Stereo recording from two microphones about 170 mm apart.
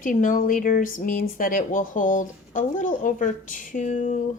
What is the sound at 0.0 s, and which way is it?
Speech, 50° left (ahead or behind).